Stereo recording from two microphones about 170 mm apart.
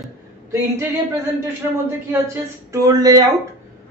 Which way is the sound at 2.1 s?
15° right (ahead or behind).